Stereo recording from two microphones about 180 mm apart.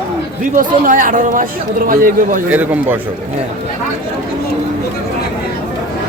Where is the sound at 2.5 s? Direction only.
10° right (ahead or behind).